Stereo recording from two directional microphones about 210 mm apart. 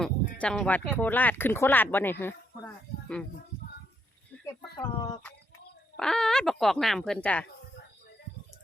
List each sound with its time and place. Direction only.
0.0 s speech: 5° left (ahead or behind)
4.4 s a sound: 20° left (ahead or behind)
6.0 s speech: 5° left (ahead or behind)